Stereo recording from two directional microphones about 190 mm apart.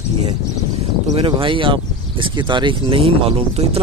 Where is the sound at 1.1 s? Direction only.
25° right (ahead or behind).